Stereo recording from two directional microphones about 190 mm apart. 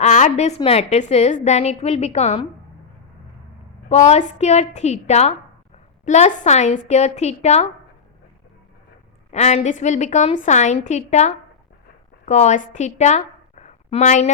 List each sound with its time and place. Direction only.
0.0 s a woman's voice: 35° left (ahead or behind)
3.8 s a woman's voice: 35° left (ahead or behind)
9.3 s a woman's voice: 35° left (ahead or behind)